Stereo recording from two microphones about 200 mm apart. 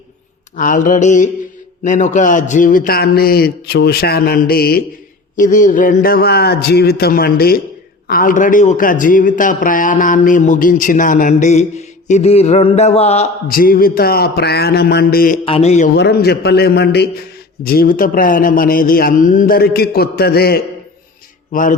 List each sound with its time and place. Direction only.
0.5 s a man's voice: 40° left (ahead or behind)
13.5 s a man's voice: 45° left (ahead or behind)
15.4 s a man's voice: 30° left (ahead or behind)
16.0 s a man's voice: 55° left (ahead or behind)
21.5 s a man's voice: 40° left (ahead or behind)